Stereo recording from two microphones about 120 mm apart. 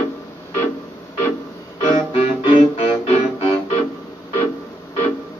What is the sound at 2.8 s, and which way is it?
Music, 55° left (ahead or behind).